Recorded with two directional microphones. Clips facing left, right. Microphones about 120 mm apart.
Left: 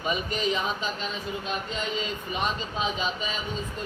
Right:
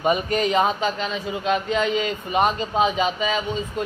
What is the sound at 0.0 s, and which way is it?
Speech, 55° right (ahead or behind).